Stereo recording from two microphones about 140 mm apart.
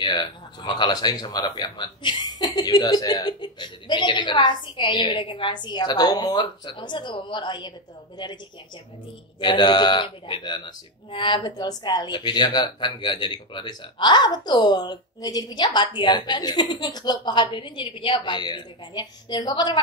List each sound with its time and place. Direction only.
0.0 s speech: 35° left (ahead or behind)
9.4 s speech: 35° left (ahead or behind)